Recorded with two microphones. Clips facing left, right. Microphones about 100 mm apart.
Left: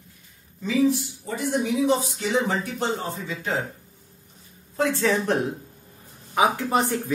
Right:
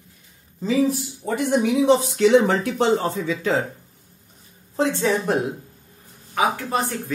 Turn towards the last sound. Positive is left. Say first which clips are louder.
# left 1 dB
turn(degrees=20)  # may be behind; listen again after turning